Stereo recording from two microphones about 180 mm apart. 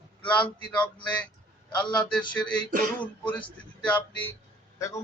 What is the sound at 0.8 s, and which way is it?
Speech, 5° left (ahead or behind).